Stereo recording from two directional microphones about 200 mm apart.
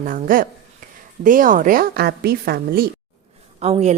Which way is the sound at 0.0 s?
45° right (ahead or behind).